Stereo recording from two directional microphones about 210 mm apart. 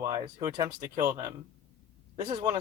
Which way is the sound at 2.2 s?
30° right (ahead or behind).